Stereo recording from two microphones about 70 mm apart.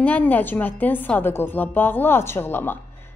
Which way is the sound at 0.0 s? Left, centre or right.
Left.